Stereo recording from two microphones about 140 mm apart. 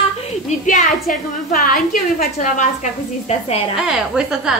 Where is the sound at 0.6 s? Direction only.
60° left (ahead or behind).